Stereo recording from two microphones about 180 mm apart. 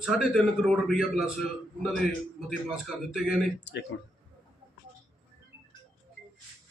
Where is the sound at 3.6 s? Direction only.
75° left (ahead or behind).